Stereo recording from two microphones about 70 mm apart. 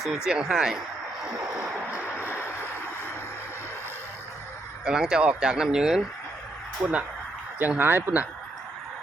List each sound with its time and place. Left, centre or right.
0.3 s speech: centre
2.0 s a sound: left
4.9 s speech: centre
6.8 s speech: right
7.8 s speech: right